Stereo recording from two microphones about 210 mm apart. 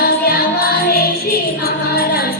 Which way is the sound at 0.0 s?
45° left (ahead or behind).